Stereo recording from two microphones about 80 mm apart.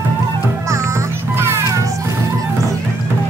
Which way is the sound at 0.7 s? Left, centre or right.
Right.